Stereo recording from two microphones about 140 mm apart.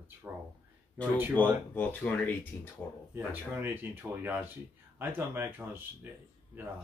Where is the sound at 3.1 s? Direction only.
15° right (ahead or behind).